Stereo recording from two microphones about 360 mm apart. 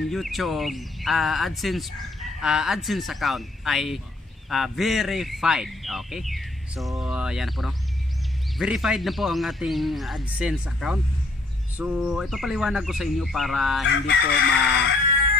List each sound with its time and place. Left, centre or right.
0.0 s speech: centre
13.8 s chicken: left